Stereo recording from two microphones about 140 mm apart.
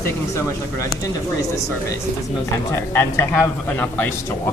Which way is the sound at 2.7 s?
15° left (ahead or behind).